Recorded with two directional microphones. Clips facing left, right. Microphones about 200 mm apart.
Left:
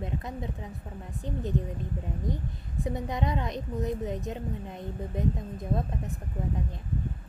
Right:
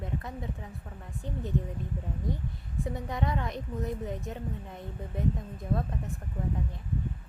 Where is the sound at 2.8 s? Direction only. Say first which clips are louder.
Left 2 dB; 20° left (ahead or behind).